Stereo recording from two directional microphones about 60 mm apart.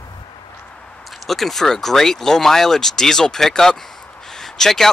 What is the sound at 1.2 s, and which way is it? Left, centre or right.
Speech, centre.